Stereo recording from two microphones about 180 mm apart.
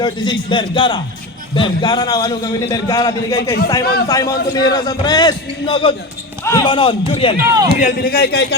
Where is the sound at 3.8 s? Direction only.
60° left (ahead or behind).